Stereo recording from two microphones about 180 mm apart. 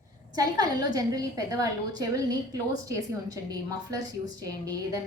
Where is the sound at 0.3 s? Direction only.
20° right (ahead or behind).